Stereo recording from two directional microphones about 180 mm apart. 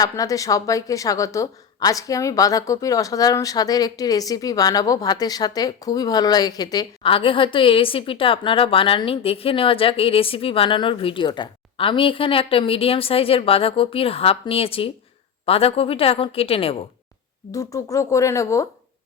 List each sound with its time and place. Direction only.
0.0 s a woman's voice: 20° left (ahead or behind)
17.5 s speech: 20° left (ahead or behind)